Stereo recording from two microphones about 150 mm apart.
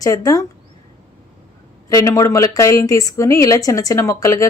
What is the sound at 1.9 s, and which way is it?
A woman's voice, 20° left (ahead or behind).